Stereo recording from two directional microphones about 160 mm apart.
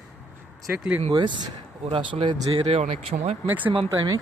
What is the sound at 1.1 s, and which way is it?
Speech, 30° right (ahead or behind).